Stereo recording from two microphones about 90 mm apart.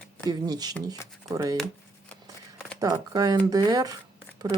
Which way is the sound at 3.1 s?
45° right (ahead or behind).